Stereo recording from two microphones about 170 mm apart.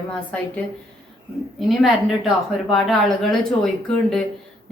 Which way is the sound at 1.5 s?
Centre (ahead or behind).